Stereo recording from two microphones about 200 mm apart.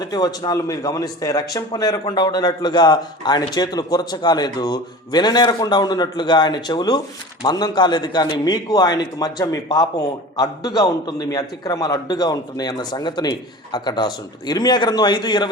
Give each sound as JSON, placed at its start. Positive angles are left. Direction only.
{"t": 0.0, "sound": "speech", "side_deg": 20}